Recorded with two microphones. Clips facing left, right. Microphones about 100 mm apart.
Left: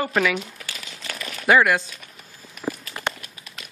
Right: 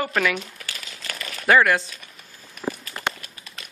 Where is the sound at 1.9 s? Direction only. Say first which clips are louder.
Left 1 dB; centre (ahead or behind).